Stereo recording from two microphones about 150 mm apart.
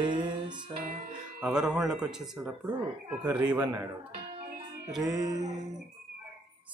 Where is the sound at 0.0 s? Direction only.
30° right (ahead or behind).